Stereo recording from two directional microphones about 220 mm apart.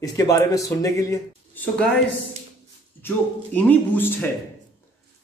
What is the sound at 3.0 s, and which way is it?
Speech, 10° left (ahead or behind).